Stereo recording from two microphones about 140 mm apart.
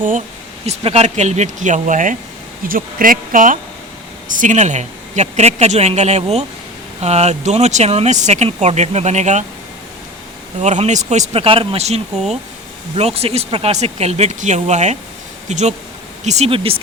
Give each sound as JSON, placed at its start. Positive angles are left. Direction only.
{"t": 0.6, "sound": "speech", "side_deg": -45}
{"t": 2.6, "sound": "speech", "side_deg": -85}
{"t": 10.6, "sound": "speech", "side_deg": -55}